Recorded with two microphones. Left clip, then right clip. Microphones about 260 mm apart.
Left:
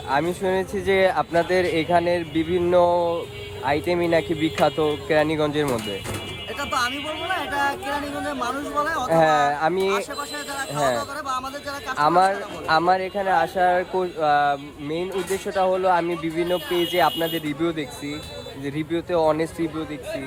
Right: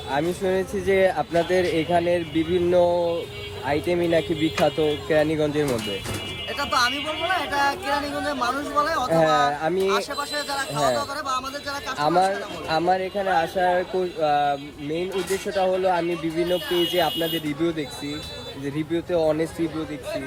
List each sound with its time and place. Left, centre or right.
0.1 s speech: left
0.6 s speech: centre
0.9 s speech: left
6.6 s speech: centre
9.0 s speech: left
9.7 s speech: centre
12.2 s speech: left